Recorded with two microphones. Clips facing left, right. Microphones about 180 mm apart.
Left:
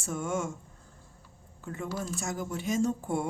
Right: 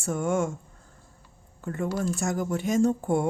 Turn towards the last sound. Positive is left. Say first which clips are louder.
# right 6 dB
turn(degrees=-60)  # may be behind; listen again after turning